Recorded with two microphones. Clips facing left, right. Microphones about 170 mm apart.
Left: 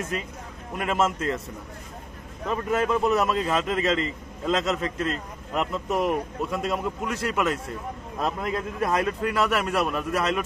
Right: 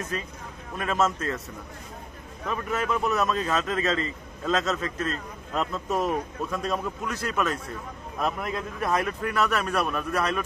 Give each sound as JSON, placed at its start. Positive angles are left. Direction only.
{"t": 1.0, "sound": "a man's voice", "side_deg": 25}
{"t": 2.4, "sound": "a man's voice", "side_deg": 30}